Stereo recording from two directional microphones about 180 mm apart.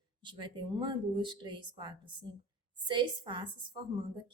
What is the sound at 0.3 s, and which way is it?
A woman's voice, 25° right (ahead or behind).